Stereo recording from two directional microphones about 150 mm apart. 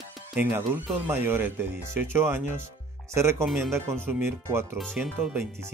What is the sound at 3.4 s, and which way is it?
Speech, centre (ahead or behind).